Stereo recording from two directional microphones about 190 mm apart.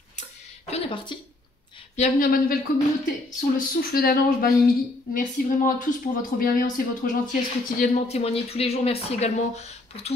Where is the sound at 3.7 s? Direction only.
50° left (ahead or behind).